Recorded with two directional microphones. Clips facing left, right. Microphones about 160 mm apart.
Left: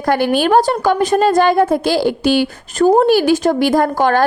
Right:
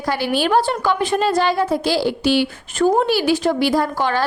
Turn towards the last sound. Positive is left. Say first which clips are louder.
# left 5 dB
turn(degrees=50)  # may be behind; listen again after turning